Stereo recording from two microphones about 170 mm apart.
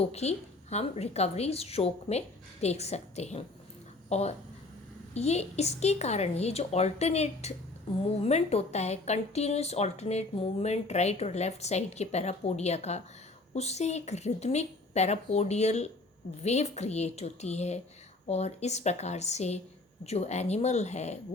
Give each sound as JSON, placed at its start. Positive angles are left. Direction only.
{"t": 0.0, "sound": "speech", "side_deg": 40}